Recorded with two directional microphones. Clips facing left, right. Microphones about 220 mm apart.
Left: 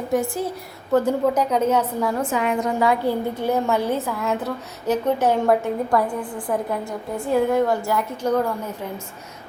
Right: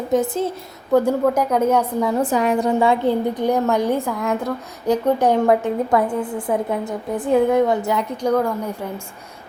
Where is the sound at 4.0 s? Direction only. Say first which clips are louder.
Right 3 dB; 5° left (ahead or behind).